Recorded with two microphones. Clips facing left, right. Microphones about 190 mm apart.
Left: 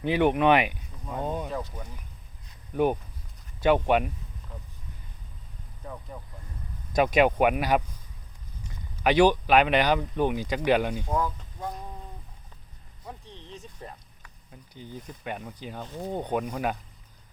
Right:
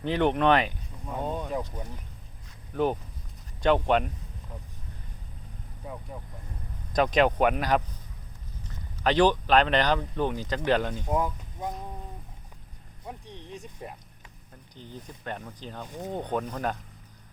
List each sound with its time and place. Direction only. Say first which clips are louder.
0.0 s speech: left 2 dB; 10° left (ahead or behind)
1.5 s speech: right 2 dB; 15° right (ahead or behind)
2.7 s speech: left 2 dB; 15° left (ahead or behind)
6.1 s speech: right 1 dB; 5° right (ahead or behind)
6.9 s speech: left 1 dB; 10° left (ahead or behind)
11.0 s speech: right 1 dB; 20° right (ahead or behind)
13.1 s a sound: right 2 dB; 15° right (ahead or behind)
14.5 s speech: left 2 dB; 10° left (ahead or behind)